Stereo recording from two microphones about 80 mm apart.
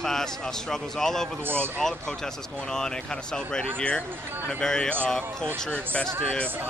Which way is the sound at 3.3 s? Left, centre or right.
Centre.